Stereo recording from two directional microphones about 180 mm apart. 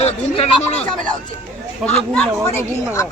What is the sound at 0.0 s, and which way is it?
Speech, 35° left (ahead or behind).